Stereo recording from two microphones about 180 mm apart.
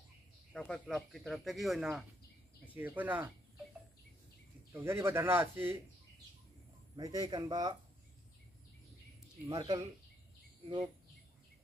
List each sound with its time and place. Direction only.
0.5 s speech: 5° left (ahead or behind)
4.7 s speech: 15° right (ahead or behind)
7.0 s a man's voice: 20° right (ahead or behind)
9.5 s a man's voice: 25° right (ahead or behind)